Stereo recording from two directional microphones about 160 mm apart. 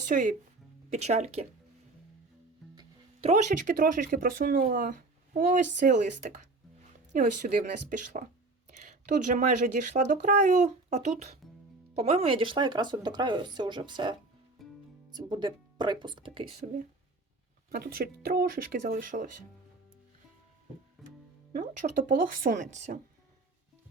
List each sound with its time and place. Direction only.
0.1 s speech: 50° right (ahead or behind)
2.7 s speech: 40° right (ahead or behind)
14.6 s music: centre (ahead or behind)
15.1 s speech: 25° right (ahead or behind)
17.7 s speech: 70° right (ahead or behind)
21.0 s music: centre (ahead or behind)
21.5 s speech: 50° right (ahead or behind)